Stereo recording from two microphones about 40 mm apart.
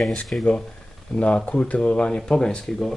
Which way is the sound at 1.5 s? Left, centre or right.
Left.